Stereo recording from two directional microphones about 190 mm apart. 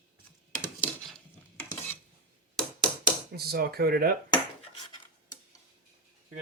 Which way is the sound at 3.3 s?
55° right (ahead or behind).